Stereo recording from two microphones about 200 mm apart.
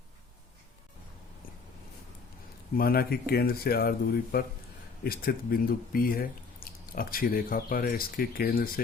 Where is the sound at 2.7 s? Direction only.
50° left (ahead or behind).